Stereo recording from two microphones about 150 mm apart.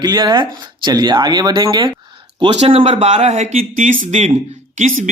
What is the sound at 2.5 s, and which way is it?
Speech, 45° right (ahead or behind).